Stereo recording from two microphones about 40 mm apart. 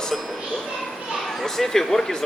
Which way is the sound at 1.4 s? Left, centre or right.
Centre.